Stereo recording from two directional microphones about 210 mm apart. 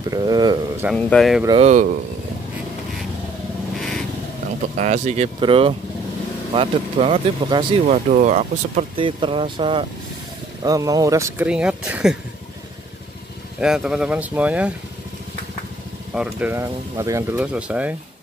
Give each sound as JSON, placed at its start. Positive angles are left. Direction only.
{"t": 0.1, "sound": "speech", "side_deg": -20}
{"t": 0.9, "sound": "speech", "side_deg": 0}
{"t": 1.6, "sound": "speech", "side_deg": -35}
{"t": 4.7, "sound": "speech", "side_deg": -35}
{"t": 8.1, "sound": "speech", "side_deg": -35}
{"t": 13.6, "sound": "speech", "side_deg": -5}
{"t": 16.2, "sound": "speech", "side_deg": -5}